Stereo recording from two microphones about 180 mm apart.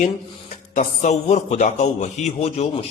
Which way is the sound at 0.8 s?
40° left (ahead or behind).